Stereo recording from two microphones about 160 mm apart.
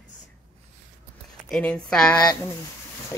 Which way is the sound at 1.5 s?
5° left (ahead or behind).